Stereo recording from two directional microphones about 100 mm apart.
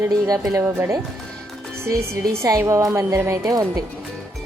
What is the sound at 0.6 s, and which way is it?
Speech, 25° right (ahead or behind).